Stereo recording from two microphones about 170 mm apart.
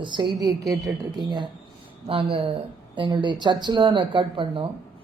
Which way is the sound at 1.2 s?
25° right (ahead or behind).